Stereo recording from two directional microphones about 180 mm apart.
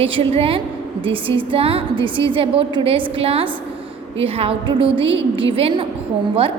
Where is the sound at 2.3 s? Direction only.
30° right (ahead or behind).